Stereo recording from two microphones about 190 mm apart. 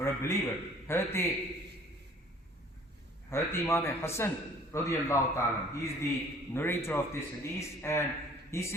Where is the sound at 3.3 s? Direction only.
15° left (ahead or behind).